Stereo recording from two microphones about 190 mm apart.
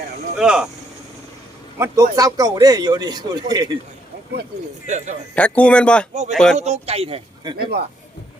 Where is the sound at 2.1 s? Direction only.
20° right (ahead or behind).